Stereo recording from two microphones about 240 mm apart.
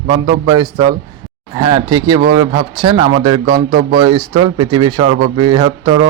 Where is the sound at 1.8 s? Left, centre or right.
Centre.